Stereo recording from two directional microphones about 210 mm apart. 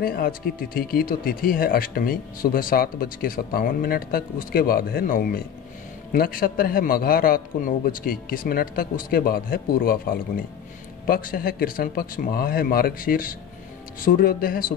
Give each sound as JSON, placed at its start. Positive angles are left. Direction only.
{"t": 0.0, "sound": "speech", "side_deg": 45}